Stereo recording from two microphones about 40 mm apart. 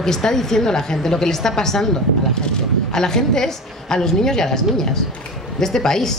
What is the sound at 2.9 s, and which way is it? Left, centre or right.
Speech, centre.